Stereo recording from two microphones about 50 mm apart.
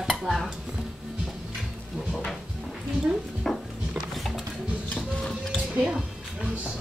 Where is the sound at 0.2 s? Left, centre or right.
Centre.